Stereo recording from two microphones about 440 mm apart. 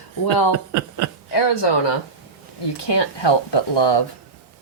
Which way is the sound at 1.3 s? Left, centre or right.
Left.